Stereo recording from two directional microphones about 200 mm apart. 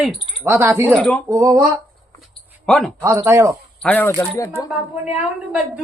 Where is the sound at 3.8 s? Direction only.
10° left (ahead or behind).